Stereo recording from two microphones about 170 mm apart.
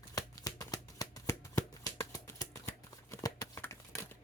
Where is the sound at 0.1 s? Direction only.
20° left (ahead or behind).